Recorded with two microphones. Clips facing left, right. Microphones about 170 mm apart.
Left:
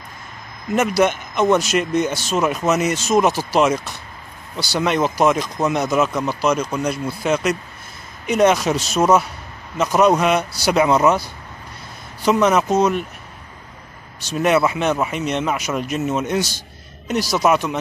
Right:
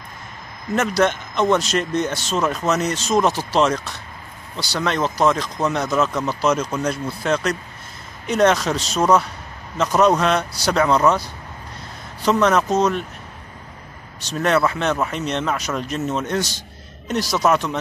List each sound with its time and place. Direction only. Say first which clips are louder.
0.7 s speech: left 2 dB; 10° left (ahead or behind)
12.3 s speech: left 1 dB; 5° left (ahead or behind)
14.3 s speech: left 2 dB; 10° left (ahead or behind)